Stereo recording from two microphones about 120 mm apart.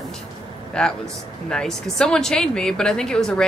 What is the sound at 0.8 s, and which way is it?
A man's voice, 5° left (ahead or behind).